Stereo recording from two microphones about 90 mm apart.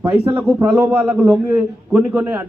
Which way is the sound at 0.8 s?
25° right (ahead or behind).